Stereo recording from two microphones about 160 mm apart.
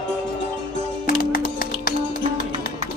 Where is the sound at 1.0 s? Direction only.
65° left (ahead or behind).